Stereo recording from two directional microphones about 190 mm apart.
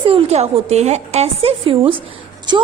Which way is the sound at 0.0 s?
30° right (ahead or behind).